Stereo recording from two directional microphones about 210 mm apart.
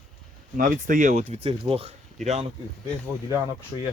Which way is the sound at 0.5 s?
40° right (ahead or behind).